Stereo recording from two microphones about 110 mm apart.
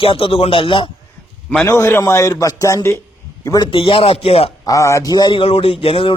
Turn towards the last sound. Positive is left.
turn(degrees=55)  # may be behind; listen again after turning